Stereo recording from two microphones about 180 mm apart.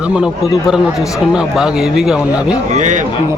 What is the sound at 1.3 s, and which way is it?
A man's voice, 5° right (ahead or behind).